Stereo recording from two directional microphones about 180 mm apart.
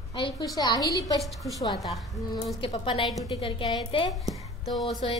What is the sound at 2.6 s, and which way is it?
A woman's voice, 30° left (ahead or behind).